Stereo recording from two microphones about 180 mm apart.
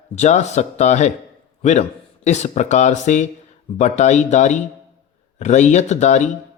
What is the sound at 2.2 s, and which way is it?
A man's voice, 40° left (ahead or behind).